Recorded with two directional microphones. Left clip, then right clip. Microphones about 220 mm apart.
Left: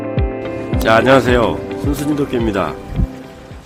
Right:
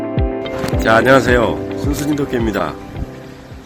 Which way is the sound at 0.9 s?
5° left (ahead or behind).